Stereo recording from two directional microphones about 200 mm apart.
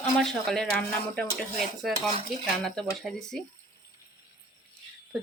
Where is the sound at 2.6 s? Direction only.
Centre (ahead or behind).